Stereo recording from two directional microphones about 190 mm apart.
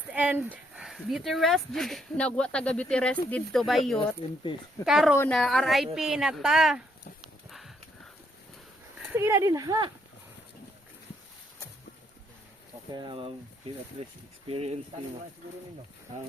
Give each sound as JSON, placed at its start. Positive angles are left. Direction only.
{"t": 0.1, "sound": "speech", "side_deg": -5}
{"t": 5.1, "sound": "a woman's voice", "side_deg": 10}
{"t": 5.4, "sound": "speech", "side_deg": 0}
{"t": 9.0, "sound": "speech", "side_deg": -10}
{"t": 12.9, "sound": "speech", "side_deg": -25}
{"t": 14.4, "sound": "speech", "side_deg": -30}